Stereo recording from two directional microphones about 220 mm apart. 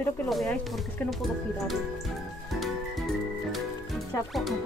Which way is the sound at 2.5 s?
Centre (ahead or behind).